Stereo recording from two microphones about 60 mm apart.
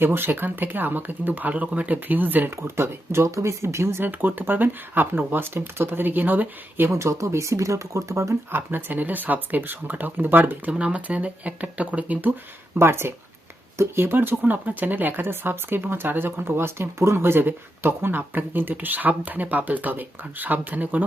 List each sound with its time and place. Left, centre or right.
0.0 s speech: right
2.6 s speech: right
4.0 s speech: right
6.9 s speech: right
8.5 s speech: right
10.7 s speech: right
12.8 s speech: right